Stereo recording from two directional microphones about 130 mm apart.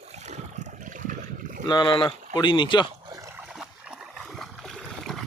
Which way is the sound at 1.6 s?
35° left (ahead or behind).